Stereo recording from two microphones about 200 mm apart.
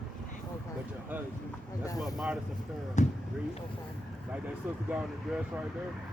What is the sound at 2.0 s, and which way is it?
Speech, centre (ahead or behind).